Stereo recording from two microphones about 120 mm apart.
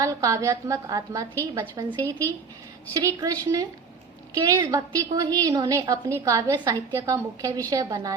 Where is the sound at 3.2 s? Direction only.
30° right (ahead or behind).